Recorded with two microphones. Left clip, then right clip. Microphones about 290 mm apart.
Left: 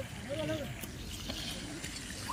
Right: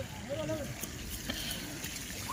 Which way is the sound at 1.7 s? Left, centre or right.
Right.